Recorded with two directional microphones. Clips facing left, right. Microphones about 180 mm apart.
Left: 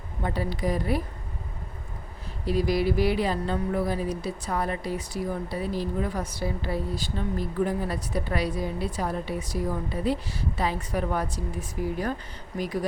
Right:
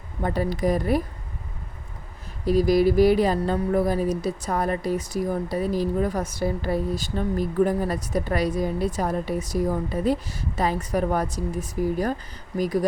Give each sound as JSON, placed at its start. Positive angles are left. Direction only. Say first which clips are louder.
{"t": 0.2, "sound": "speech", "louder": "right 5 dB", "side_deg": -45}
{"t": 2.5, "sound": "speech", "louder": "right 6 dB", "side_deg": -40}